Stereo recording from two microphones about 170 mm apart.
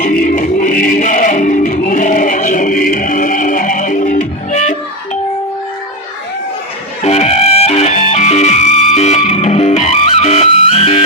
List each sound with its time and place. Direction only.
0.0 s music: 55° left (ahead or behind)
7.0 s music: 40° left (ahead or behind)